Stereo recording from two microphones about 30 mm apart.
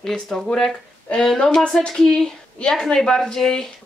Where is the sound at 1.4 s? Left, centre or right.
Left.